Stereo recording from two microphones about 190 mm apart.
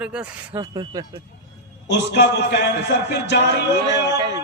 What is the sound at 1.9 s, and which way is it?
A man's voice, 60° left (ahead or behind).